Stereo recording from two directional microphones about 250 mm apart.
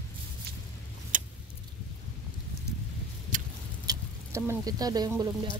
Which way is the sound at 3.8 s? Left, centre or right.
Centre.